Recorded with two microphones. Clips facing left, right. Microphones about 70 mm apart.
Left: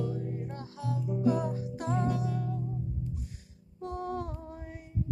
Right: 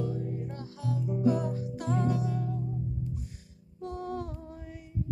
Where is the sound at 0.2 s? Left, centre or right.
Left.